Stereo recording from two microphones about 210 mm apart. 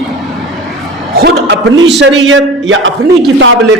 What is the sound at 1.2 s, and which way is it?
A man's voice, 50° right (ahead or behind).